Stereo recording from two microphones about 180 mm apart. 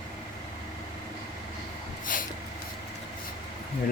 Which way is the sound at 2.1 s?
50° left (ahead or behind).